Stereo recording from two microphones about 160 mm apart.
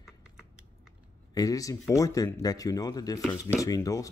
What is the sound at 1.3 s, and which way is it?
Speech, 20° left (ahead or behind).